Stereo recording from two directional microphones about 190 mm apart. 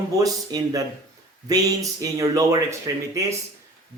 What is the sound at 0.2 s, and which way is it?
A man's voice, 20° right (ahead or behind).